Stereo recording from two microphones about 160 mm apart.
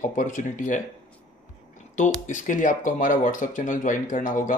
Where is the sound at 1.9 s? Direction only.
50° left (ahead or behind).